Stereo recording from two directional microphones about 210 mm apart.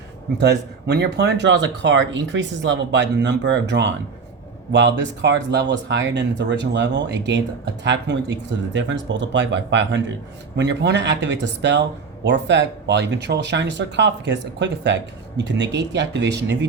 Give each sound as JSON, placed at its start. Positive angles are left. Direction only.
{"t": 0.3, "sound": "speech", "side_deg": -50}